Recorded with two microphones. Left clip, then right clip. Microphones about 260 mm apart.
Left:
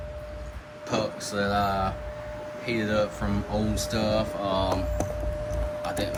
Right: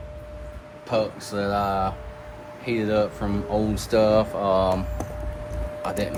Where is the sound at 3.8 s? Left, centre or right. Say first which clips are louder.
Right 9 dB; right.